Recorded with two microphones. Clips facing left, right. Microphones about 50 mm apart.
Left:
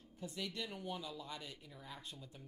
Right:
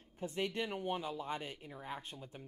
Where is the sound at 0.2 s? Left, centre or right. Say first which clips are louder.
Right 7 dB; right.